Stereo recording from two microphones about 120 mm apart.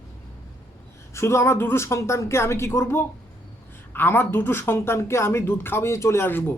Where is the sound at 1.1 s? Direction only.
25° left (ahead or behind).